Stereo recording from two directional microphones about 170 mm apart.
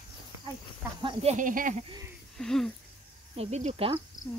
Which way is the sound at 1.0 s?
30° right (ahead or behind).